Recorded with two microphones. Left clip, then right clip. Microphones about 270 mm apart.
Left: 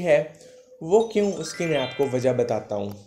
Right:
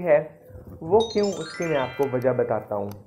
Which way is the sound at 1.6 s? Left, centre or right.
Left.